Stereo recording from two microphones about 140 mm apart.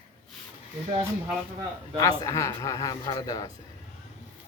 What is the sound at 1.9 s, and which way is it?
Speech, 25° left (ahead or behind).